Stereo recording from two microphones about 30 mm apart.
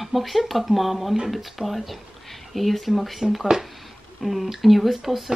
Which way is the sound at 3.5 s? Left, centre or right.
Centre.